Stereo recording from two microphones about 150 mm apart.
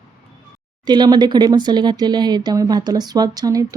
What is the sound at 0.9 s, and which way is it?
Speech, 25° right (ahead or behind).